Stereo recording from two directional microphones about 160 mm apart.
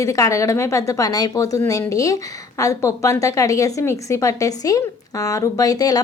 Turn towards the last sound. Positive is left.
turn(degrees=25)  # may be behind; listen again after turning